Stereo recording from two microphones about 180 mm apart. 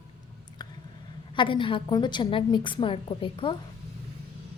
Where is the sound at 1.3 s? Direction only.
25° left (ahead or behind).